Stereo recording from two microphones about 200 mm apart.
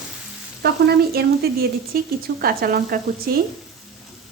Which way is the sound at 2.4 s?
50° right (ahead or behind).